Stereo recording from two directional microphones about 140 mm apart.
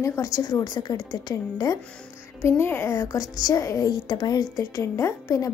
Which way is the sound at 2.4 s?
15° left (ahead or behind).